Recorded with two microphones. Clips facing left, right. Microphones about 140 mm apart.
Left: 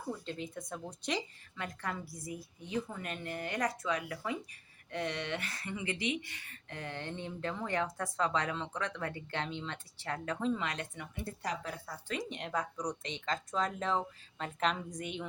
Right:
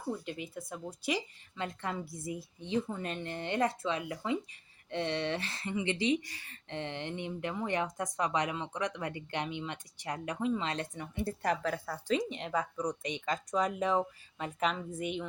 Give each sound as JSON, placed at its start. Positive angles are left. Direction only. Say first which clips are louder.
{"t": 0.3, "sound": "speech", "louder": "even", "side_deg": -10}
{"t": 1.5, "sound": "a woman's voice", "louder": "right 3 dB", "side_deg": -25}
{"t": 10.6, "sound": "a woman's voice", "louder": "right 3 dB", "side_deg": -30}
{"t": 11.4, "sound": "speech", "louder": "right 7 dB", "side_deg": -75}
{"t": 12.3, "sound": "speech", "louder": "right 2 dB", "side_deg": 0}